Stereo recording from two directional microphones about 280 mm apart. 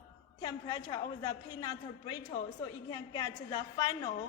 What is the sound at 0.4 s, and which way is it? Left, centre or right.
A man's voice, centre.